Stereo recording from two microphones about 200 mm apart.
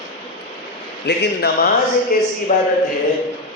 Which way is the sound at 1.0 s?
55° left (ahead or behind).